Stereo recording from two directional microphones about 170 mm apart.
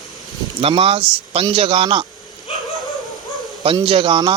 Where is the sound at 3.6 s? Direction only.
30° right (ahead or behind).